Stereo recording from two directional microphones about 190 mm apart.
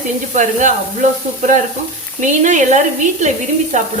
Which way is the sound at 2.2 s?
40° right (ahead or behind).